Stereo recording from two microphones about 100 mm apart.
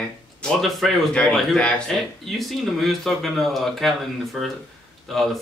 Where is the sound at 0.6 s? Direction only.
Centre (ahead or behind).